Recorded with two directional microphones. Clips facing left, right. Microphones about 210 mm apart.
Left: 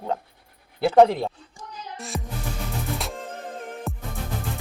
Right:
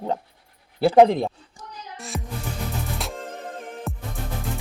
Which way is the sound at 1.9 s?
Centre (ahead or behind).